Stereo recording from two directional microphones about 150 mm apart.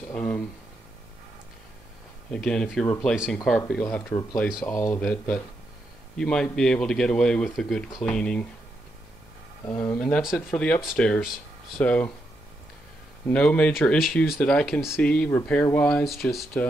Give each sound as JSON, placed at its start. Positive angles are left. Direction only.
{"t": 0.1, "sound": "speech", "side_deg": 10}
{"t": 2.3, "sound": "speech", "side_deg": 5}
{"t": 4.4, "sound": "speech", "side_deg": -5}
{"t": 4.6, "sound": "speech", "side_deg": 15}
{"t": 5.0, "sound": "speech", "side_deg": 5}
{"t": 9.7, "sound": "speech", "side_deg": 10}
{"t": 13.3, "sound": "speech", "side_deg": 5}